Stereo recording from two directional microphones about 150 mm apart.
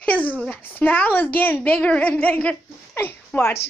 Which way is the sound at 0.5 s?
10° left (ahead or behind).